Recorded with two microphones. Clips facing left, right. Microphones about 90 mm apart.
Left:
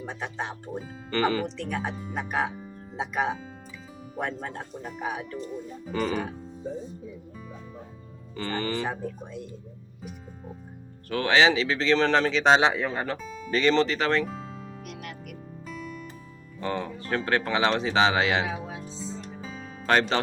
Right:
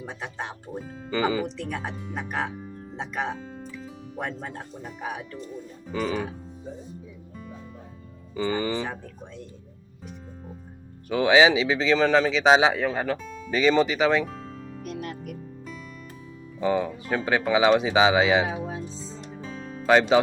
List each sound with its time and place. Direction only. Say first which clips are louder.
0.0 s speech: left 1 dB; centre (ahead or behind)
8.4 s speech: right 3 dB; 15° right (ahead or behind)
8.9 s speech: left 4 dB; 15° left (ahead or behind)
11.1 s speech: right 3 dB; 10° right (ahead or behind)
13.5 s speech: right 2 dB; 10° right (ahead or behind)
15.0 s music: right 5 dB; 35° right (ahead or behind)
15.6 s music: left 2 dB; centre (ahead or behind)
16.6 s speech: right 6 dB; 10° right (ahead or behind)
18.9 s music: left 1 dB; centre (ahead or behind)
19.9 s speech: right 5 dB; 5° right (ahead or behind)